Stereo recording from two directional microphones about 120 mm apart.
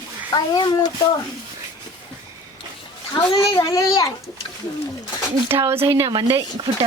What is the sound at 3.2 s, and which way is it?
Speech, 40° left (ahead or behind).